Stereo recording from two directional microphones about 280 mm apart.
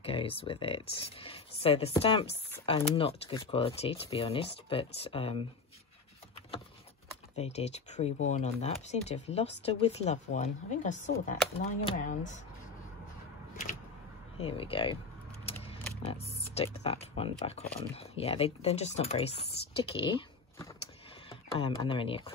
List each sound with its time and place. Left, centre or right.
0.0 s speech: centre
7.3 s speech: left
14.4 s speech: centre
16.0 s speech: left